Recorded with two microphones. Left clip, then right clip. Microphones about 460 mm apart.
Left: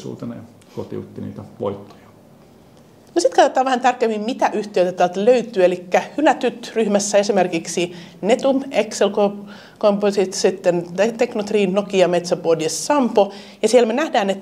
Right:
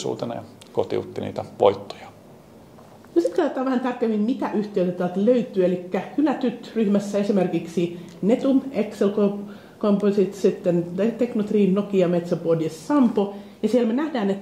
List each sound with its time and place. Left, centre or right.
1.6 s speech: right
3.3 s a woman's voice: left